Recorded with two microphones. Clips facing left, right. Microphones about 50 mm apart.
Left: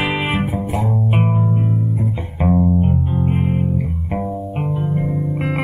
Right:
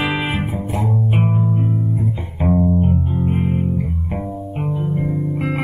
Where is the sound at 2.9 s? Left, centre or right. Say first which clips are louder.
Even; centre.